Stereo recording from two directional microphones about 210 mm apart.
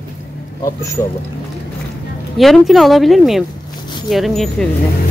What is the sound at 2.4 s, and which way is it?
Speech, centre (ahead or behind).